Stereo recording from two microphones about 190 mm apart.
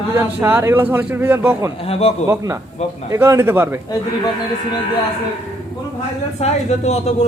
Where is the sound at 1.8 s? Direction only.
30° left (ahead or behind).